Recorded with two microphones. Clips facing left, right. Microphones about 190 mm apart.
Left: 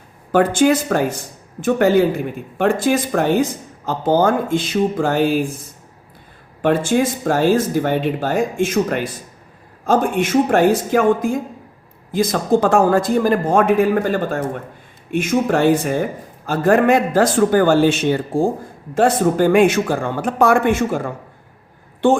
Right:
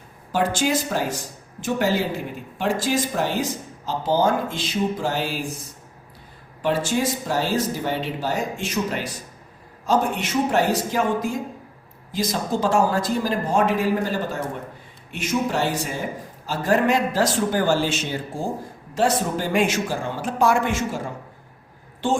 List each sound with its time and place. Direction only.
0.3 s a man's voice: 55° left (ahead or behind)
6.6 s a man's voice: 55° left (ahead or behind)